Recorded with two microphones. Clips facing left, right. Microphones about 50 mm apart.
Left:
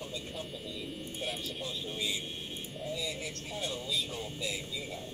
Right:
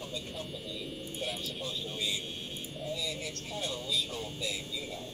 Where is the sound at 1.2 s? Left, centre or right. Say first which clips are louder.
Even; centre.